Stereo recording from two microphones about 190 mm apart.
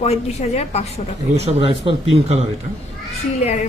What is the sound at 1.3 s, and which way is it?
Speech, 35° right (ahead or behind).